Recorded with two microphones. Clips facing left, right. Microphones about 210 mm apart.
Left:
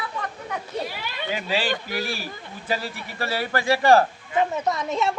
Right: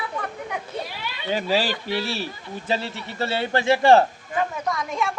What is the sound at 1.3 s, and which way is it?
Speech, 40° right (ahead or behind).